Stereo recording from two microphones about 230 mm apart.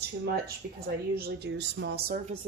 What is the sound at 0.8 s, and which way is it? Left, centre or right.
A woman's voice, right.